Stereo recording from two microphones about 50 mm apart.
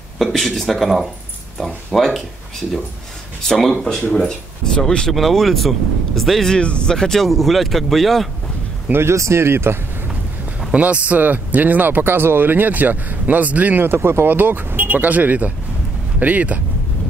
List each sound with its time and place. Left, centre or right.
0.2 s speech: centre
3.4 s speech: centre
5.1 s speech: centre
6.5 s speech: centre
9.1 s speech: right
10.7 s speech: right
13.8 s speech: right
14.3 s speech: right